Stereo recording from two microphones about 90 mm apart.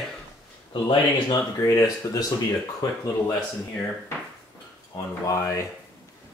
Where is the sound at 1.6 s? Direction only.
40° left (ahead or behind).